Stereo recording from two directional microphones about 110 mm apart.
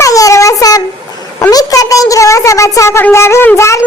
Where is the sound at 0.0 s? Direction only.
30° left (ahead or behind).